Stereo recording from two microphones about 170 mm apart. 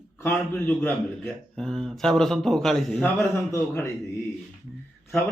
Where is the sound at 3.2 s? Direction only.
15° left (ahead or behind).